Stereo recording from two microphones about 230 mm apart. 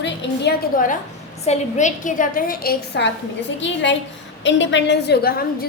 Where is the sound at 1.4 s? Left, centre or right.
Left.